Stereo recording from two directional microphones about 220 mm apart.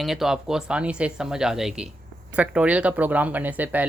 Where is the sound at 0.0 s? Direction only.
Centre (ahead or behind).